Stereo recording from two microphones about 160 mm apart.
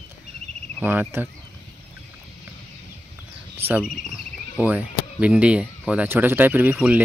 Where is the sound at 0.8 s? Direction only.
15° right (ahead or behind).